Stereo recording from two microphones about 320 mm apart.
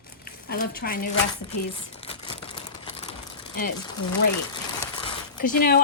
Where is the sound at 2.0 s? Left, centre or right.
Centre.